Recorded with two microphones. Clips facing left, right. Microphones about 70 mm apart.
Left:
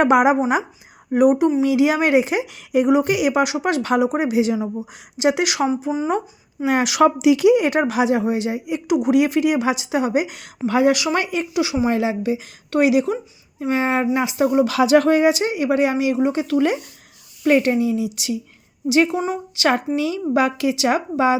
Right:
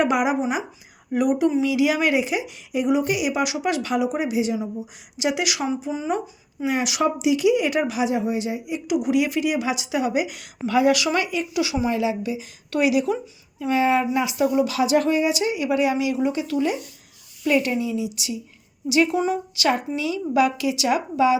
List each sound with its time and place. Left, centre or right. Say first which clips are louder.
0.0 s speech: left 6 dB; left
1.1 s speech: left 5 dB; left
1.6 s speech: left 3 dB; left
3.4 s speech: left 3 dB; left
4.4 s speech: left 4 dB; left
6.7 s speech: left 5 dB; left
7.0 s speech: left 6 dB; left
11.1 s speech: left 2 dB; left
11.9 s speech: left 3 dB; left
14.7 s a sound: left 5 dB; left
15.2 s speech: left 5 dB; left
16.4 s speech: left 4 dB; left
17.4 s speech: left 5 dB; left
18.9 s speech: left 2 dB; left